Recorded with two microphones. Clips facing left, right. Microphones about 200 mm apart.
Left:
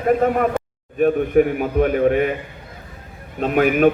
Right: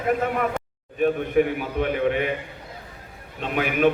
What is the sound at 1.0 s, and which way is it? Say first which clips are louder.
A man's voice: left 5 dB; 45° left (ahead or behind).